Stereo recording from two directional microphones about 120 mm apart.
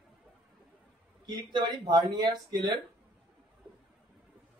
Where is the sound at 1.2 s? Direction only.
40° right (ahead or behind).